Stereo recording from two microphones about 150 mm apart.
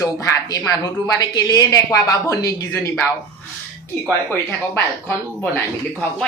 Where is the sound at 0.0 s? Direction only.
25° left (ahead or behind).